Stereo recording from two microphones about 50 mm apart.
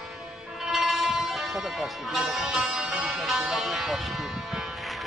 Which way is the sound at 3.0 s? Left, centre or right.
Centre.